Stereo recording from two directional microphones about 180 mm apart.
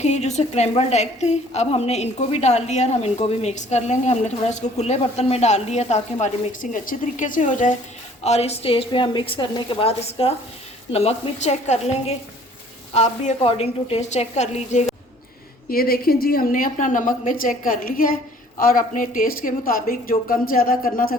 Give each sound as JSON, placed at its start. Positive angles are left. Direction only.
{"t": 0.0, "sound": "a woman's voice", "side_deg": 40}
{"t": 15.7, "sound": "a woman's voice", "side_deg": 55}